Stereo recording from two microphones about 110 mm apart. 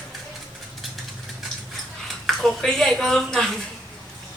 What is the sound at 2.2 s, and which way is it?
Speech, centre (ahead or behind).